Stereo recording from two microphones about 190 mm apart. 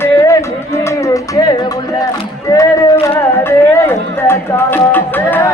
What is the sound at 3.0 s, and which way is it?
Music, 15° left (ahead or behind).